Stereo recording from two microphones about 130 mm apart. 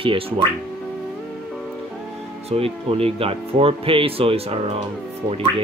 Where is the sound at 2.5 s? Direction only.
50° right (ahead or behind).